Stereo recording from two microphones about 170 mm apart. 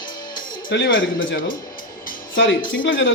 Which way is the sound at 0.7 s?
90° left.